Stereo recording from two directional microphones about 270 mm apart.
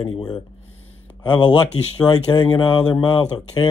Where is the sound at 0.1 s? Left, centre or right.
Centre.